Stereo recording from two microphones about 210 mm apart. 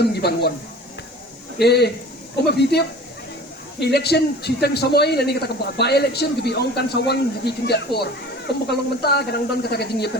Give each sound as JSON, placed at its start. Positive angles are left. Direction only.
{"t": 0.0, "sound": "a man's voice", "side_deg": 50}
{"t": 1.5, "sound": "a man's voice", "side_deg": 50}